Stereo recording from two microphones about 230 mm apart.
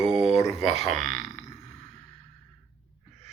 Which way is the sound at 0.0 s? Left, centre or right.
Centre.